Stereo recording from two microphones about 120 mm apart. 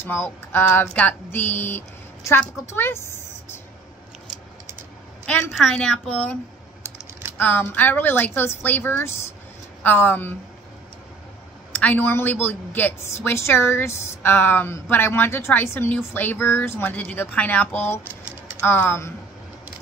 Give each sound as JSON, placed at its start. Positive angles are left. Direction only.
{"t": 0.0, "sound": "a woman's voice", "side_deg": 20}
{"t": 5.2, "sound": "a woman's voice", "side_deg": 5}
{"t": 7.3, "sound": "a woman's voice", "side_deg": 15}
{"t": 11.7, "sound": "a woman's voice", "side_deg": 15}